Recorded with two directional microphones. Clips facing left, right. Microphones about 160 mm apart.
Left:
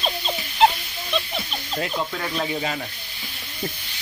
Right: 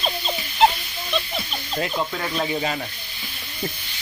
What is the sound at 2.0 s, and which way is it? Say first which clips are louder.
Speech: right 1 dB; 20° right (ahead or behind).